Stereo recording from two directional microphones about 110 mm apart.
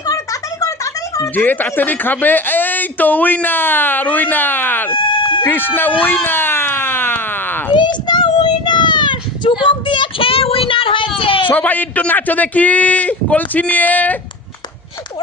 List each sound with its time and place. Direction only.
0.0 s music: 30° left (ahead or behind)
1.4 s speech: 15° left (ahead or behind)
4.9 s a sound: 50° left (ahead or behind)
5.5 s speech: 20° left (ahead or behind)
6.2 s a sound: 20° left (ahead or behind)
7.7 s child singing: 40° left (ahead or behind)
11.5 s speech: 15° left (ahead or behind)